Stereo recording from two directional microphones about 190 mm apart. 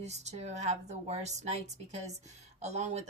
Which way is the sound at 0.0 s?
35° right (ahead or behind).